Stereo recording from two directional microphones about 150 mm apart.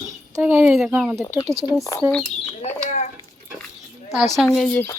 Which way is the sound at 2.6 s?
50° left (ahead or behind).